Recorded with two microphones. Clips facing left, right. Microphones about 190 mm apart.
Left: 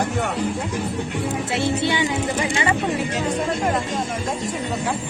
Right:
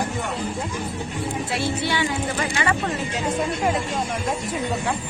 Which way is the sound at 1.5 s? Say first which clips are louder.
Left 3 dB; 20° left (ahead or behind).